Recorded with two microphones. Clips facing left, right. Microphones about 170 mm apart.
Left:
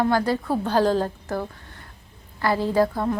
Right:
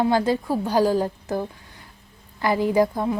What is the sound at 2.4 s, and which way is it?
Speech, 15° right (ahead or behind).